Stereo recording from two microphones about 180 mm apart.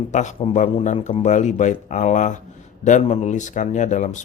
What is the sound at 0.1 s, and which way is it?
A man's voice, 40° left (ahead or behind).